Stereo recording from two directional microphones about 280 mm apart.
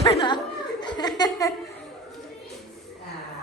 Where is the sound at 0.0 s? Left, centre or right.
Centre.